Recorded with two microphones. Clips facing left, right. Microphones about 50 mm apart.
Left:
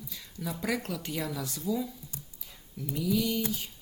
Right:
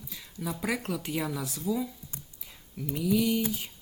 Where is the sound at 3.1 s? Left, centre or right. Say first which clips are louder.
Right 3 dB; centre.